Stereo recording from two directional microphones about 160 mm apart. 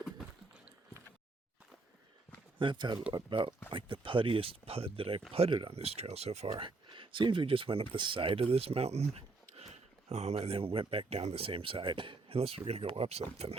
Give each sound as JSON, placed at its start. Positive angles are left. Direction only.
{"t": 2.6, "sound": "speech", "side_deg": -30}